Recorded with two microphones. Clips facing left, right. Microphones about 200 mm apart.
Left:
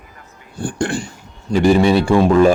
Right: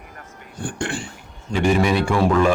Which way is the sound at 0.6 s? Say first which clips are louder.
Left 6 dB; 40° left (ahead or behind).